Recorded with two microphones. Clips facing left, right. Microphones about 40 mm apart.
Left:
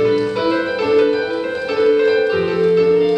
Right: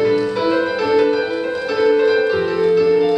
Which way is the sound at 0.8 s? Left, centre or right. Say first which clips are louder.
Left 2 dB; centre.